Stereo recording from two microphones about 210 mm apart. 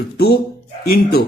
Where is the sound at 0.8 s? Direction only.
50° left (ahead or behind).